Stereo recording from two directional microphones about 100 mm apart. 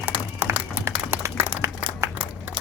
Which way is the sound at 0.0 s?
25° right (ahead or behind).